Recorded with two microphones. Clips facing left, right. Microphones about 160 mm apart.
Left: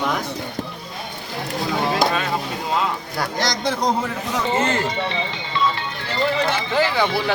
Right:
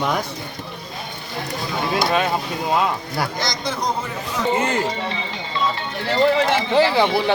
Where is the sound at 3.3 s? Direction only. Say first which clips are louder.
Left 3 dB; 90° left.